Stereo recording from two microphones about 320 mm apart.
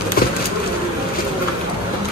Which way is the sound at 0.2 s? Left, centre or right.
Left.